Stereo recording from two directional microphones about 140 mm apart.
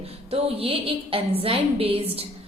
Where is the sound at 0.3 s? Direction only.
45° right (ahead or behind).